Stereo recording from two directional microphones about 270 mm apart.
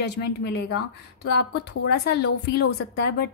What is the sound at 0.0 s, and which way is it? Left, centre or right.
A woman's voice, left.